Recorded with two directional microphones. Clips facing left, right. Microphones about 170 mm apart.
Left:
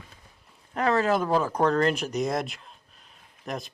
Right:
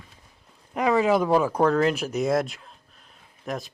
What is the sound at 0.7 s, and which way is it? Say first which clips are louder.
Speech: right 3 dB; 10° right (ahead or behind).